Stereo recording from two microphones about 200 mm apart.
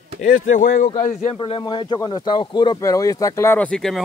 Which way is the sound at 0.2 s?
40° left (ahead or behind).